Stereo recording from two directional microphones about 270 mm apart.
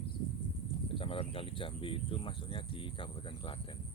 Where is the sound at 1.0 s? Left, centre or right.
Centre.